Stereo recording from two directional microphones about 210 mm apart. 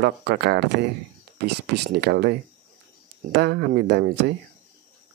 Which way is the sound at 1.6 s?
50° right (ahead or behind).